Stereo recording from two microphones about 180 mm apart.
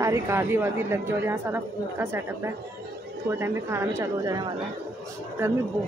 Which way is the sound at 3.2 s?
15° right (ahead or behind).